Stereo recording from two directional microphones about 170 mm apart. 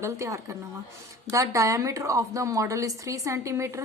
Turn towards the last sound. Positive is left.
turn(degrees=-15)  # may be behind; listen again after turning